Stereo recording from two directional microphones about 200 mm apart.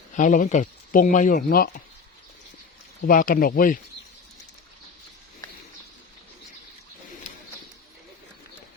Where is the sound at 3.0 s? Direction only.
45° left (ahead or behind).